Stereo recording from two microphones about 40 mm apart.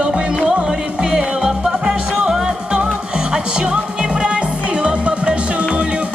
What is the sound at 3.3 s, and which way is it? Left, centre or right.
Music, right.